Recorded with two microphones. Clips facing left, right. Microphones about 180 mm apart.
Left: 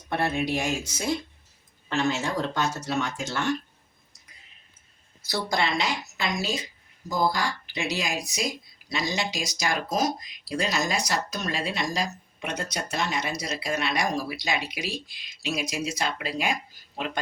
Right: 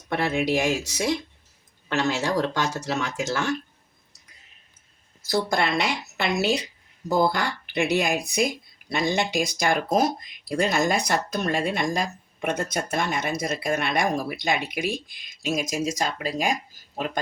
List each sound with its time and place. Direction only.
0.1 s speech: 90° right
5.3 s a woman's voice: 55° right (ahead or behind)